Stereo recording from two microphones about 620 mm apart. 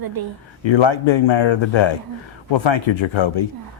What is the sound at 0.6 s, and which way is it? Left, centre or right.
Speech, left.